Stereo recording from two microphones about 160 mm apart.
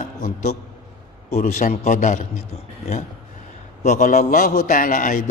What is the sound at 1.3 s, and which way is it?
A man's voice, 50° left (ahead or behind).